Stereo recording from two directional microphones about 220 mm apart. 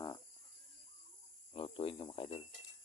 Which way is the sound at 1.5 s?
25° left (ahead or behind).